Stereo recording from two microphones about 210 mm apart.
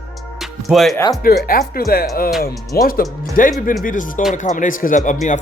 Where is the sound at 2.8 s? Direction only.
45° left (ahead or behind).